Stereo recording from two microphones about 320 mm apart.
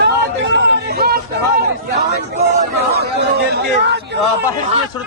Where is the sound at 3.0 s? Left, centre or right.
Right.